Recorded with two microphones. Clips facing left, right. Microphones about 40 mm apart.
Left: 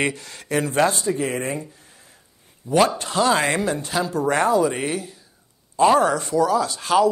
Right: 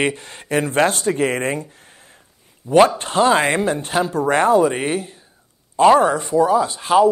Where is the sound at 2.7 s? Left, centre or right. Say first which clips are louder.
Right 5 dB; right.